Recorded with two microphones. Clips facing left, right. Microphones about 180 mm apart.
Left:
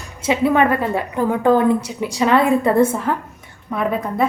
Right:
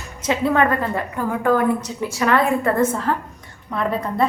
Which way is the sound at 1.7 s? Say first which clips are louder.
Left 3 dB; 15° left (ahead or behind).